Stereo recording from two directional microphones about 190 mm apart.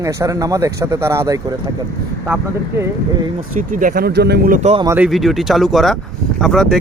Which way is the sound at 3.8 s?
50° right (ahead or behind).